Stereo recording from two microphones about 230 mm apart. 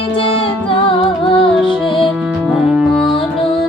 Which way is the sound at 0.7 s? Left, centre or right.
Left.